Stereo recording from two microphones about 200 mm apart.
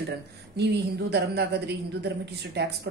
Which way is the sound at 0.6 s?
55° right (ahead or behind).